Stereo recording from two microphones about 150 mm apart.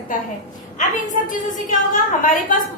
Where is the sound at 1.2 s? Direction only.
60° left (ahead or behind).